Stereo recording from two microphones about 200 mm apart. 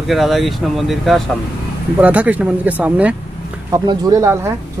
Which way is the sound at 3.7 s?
15° right (ahead or behind).